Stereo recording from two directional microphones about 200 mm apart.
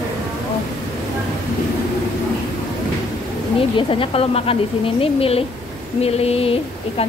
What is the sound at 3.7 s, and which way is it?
Speech, 30° left (ahead or behind).